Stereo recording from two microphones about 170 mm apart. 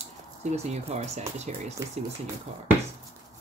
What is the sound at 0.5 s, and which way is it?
Speech, 40° right (ahead or behind).